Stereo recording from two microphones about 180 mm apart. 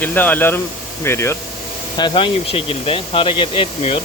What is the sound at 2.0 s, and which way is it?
Speech, 25° left (ahead or behind).